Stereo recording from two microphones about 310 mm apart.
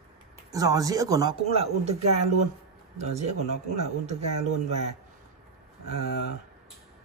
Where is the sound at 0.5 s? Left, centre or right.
Centre.